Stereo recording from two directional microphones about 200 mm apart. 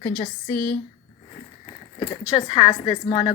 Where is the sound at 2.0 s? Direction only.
25° left (ahead or behind).